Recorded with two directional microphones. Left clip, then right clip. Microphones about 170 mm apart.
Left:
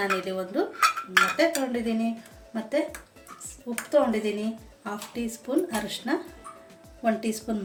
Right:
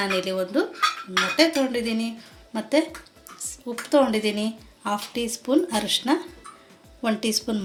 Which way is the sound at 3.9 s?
55° right (ahead or behind).